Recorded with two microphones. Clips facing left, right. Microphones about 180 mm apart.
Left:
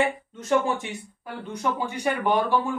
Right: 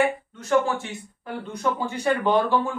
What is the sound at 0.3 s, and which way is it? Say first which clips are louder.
Speech: right 1 dB; 20° left (ahead or behind).